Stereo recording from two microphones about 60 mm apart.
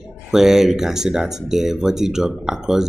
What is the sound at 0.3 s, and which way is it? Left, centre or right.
Speech, centre.